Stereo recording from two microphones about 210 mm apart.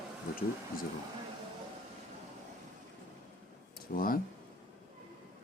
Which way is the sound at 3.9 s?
45° left (ahead or behind).